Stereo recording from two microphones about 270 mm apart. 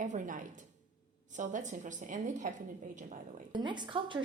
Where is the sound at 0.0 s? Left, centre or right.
Right.